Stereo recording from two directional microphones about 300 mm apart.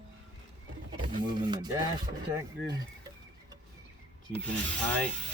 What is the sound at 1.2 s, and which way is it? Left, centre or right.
Speech, centre.